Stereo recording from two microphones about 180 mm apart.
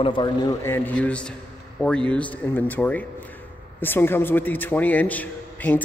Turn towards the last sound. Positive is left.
turn(degrees=10)  # may be behind; listen again after turning